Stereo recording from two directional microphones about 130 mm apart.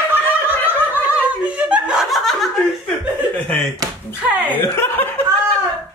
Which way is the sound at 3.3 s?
15° left (ahead or behind).